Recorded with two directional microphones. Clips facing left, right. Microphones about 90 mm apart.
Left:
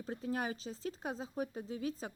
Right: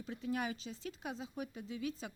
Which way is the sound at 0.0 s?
40° left (ahead or behind).